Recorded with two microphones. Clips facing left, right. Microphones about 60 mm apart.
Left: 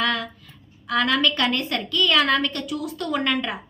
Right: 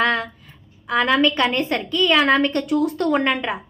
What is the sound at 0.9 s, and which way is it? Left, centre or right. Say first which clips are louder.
A woman's voice: right 3 dB; right.